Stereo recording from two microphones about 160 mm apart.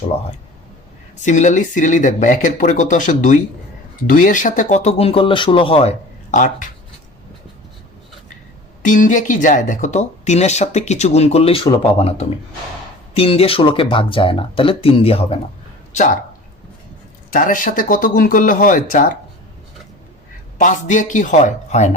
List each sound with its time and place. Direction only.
1.2 s speech: 50° left (ahead or behind)
6.3 s speech: 50° left (ahead or behind)
8.8 s speech: 55° left (ahead or behind); by 15.4 s 40° left (ahead or behind)
17.3 s speech: 55° left (ahead or behind)
20.6 s speech: 50° left (ahead or behind)